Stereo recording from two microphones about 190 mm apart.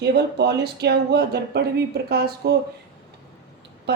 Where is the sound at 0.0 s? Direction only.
60° right (ahead or behind).